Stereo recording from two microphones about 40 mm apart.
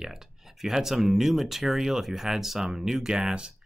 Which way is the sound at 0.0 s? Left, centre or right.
Centre.